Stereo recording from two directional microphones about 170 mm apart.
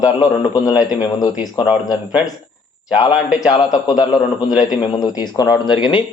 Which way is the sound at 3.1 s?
5° right (ahead or behind).